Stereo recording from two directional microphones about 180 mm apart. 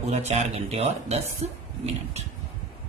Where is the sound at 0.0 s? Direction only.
40° right (ahead or behind).